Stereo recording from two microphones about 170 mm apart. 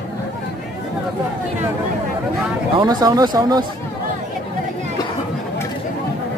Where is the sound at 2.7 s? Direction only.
25° right (ahead or behind).